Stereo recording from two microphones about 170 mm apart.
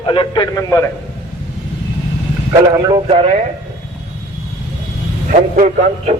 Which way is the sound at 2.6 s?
20° right (ahead or behind).